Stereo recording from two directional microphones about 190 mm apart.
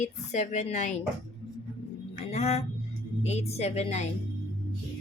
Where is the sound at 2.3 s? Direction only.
35° left (ahead or behind).